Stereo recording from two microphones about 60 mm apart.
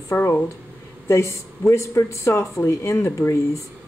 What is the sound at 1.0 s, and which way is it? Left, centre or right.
A woman's voice, left.